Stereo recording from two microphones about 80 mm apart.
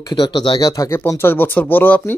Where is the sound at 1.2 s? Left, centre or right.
Left.